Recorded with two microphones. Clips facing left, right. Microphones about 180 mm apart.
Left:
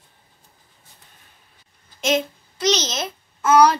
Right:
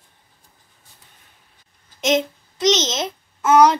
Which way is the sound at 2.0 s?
20° right (ahead or behind).